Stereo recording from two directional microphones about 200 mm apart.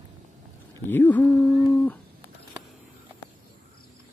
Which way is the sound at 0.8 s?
10° left (ahead or behind).